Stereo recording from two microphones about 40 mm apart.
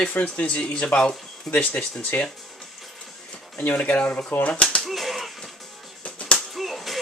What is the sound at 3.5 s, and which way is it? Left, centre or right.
Speech, left.